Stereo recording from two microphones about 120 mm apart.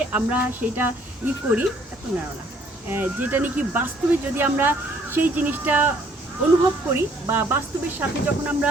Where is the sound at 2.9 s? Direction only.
15° right (ahead or behind).